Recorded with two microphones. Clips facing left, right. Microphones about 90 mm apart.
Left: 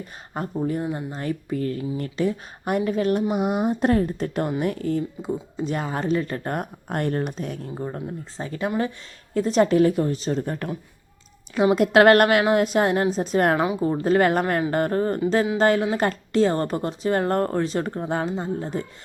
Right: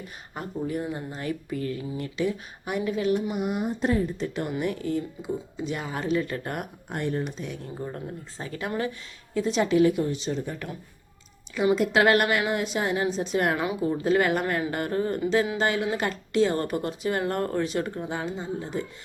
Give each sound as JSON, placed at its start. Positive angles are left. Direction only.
{"t": 0.3, "sound": "speech", "side_deg": 35}
{"t": 3.3, "sound": "speech", "side_deg": 90}
{"t": 3.8, "sound": "speech", "side_deg": 55}
{"t": 6.8, "sound": "speech", "side_deg": 55}
{"t": 7.9, "sound": "speech", "side_deg": 30}
{"t": 9.3, "sound": "speech", "side_deg": 40}
{"t": 11.7, "sound": "speech", "side_deg": 55}